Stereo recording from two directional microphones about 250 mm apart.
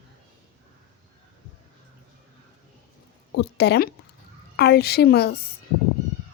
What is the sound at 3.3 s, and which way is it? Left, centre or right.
A woman's voice, left.